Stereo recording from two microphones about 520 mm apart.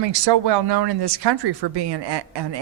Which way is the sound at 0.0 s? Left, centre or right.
Right.